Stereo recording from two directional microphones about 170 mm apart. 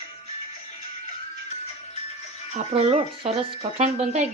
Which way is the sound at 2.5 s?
40° right (ahead or behind).